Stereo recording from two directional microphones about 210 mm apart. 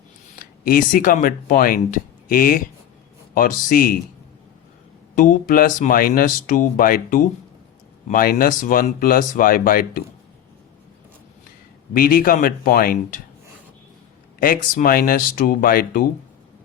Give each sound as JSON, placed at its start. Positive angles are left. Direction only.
{"t": 0.3, "sound": "speech", "side_deg": 40}
{"t": 5.1, "sound": "speech", "side_deg": 40}
{"t": 11.9, "sound": "speech", "side_deg": 45}
{"t": 14.3, "sound": "speech", "side_deg": 40}